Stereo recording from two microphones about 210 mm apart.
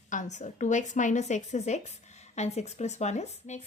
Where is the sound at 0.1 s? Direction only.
35° left (ahead or behind).